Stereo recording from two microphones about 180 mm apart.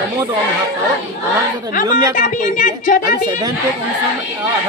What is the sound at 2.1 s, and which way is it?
Speech, 50° left (ahead or behind).